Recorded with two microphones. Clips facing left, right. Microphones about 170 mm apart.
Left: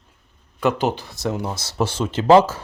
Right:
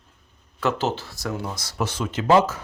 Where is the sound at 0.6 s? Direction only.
15° left (ahead or behind).